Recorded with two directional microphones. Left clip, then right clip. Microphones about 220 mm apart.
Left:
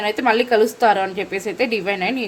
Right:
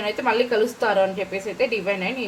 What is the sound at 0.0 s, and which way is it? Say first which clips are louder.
A woman's voice: left 4 dB; 50° left (ahead or behind).